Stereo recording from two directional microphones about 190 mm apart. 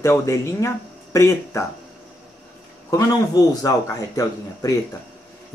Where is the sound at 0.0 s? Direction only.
15° left (ahead or behind).